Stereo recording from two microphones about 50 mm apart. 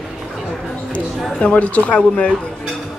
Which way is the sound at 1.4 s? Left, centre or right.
Left.